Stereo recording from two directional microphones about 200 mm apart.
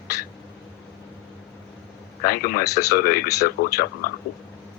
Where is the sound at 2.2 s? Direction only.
45° left (ahead or behind).